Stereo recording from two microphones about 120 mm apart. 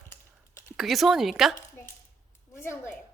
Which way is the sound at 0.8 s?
Centre (ahead or behind).